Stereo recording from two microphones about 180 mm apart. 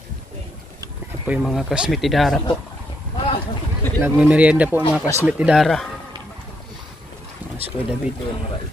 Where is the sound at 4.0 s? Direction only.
10° right (ahead or behind).